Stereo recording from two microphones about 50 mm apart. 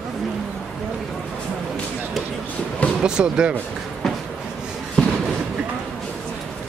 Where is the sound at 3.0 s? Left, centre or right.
Centre.